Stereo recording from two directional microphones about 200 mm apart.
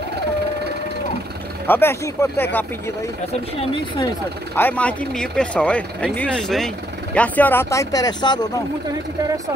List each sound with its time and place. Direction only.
1.7 s speech: 10° left (ahead or behind)
4.6 s speech: 10° left (ahead or behind)